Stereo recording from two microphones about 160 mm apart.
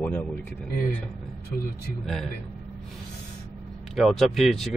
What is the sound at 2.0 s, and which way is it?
Speech, centre (ahead or behind).